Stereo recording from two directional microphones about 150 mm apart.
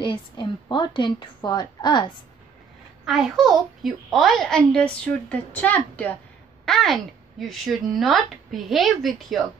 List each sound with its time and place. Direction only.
0.0 s a woman's voice: 30° left (ahead or behind)
3.1 s a child's voice: centre (ahead or behind)